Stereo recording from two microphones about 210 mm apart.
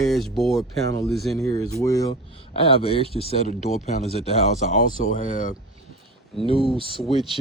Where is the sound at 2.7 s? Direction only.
25° left (ahead or behind).